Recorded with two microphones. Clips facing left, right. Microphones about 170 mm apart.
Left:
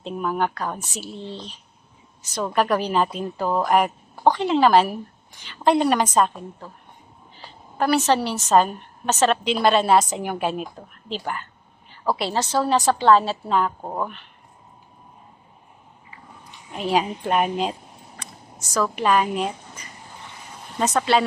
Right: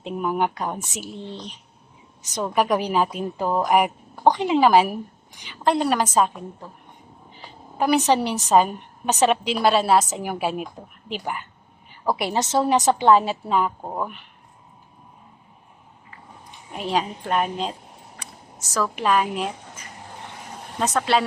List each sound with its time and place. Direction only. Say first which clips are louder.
0.0 s a woman's voice: right 1 dB; 15° right (ahead or behind)
5.6 s a woman's voice: left 2 dB; centre (ahead or behind)
7.8 s a woman's voice: even; 15° right (ahead or behind)
16.9 s a woman's voice: left 2 dB; 10° left (ahead or behind)
18.7 s a woman's voice: left 1 dB; centre (ahead or behind)